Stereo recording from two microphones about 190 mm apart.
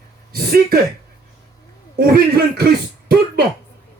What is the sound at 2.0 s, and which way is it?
Speech, 55° right (ahead or behind).